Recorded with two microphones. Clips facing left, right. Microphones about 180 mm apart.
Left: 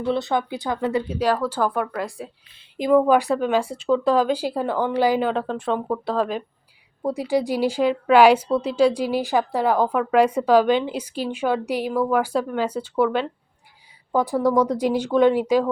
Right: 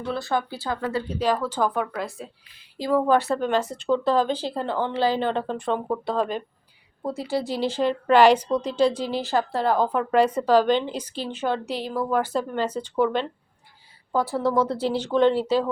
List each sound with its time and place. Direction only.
0.1 s speech: 20° left (ahead or behind)
1.0 s a woman's voice: 10° left (ahead or behind)
7.0 s a woman's voice: 15° left (ahead or behind)
14.1 s a woman's voice: 15° left (ahead or behind)